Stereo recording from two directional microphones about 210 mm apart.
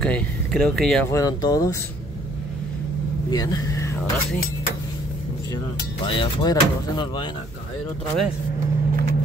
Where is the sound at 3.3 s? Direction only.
15° left (ahead or behind).